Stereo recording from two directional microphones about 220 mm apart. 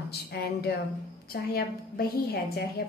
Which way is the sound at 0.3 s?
45° left (ahead or behind).